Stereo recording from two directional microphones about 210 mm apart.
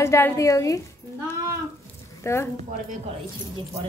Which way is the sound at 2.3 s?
15° left (ahead or behind).